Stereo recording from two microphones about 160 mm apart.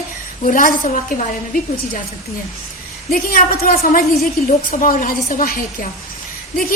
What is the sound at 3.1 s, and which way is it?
A woman's voice, 65° left (ahead or behind).